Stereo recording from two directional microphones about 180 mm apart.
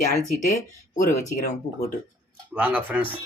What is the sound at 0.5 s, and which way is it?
Speech, 45° left (ahead or behind).